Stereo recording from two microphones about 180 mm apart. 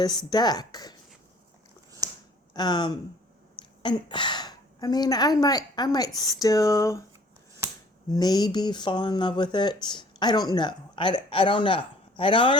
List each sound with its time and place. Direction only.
0.0 s speech: 20° left (ahead or behind)
2.5 s a woman's voice: 25° left (ahead or behind)
8.1 s speech: 20° left (ahead or behind)